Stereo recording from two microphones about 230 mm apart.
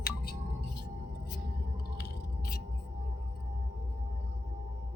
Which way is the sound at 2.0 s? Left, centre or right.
Left.